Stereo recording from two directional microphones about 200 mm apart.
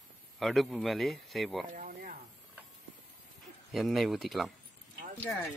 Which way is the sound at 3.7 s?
Centre (ahead or behind).